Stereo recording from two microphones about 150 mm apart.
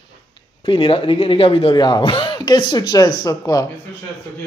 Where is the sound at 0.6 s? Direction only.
35° left (ahead or behind).